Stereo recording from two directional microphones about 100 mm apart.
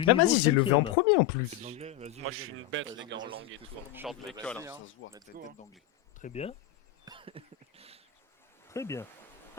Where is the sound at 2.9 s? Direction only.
45° right (ahead or behind).